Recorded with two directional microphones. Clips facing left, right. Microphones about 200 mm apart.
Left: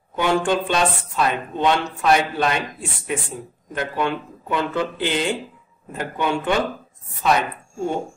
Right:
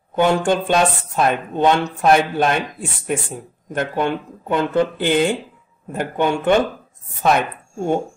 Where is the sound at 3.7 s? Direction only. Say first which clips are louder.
Right 3 dB; 45° right (ahead or behind).